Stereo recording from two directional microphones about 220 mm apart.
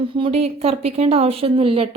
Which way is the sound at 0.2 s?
30° right (ahead or behind).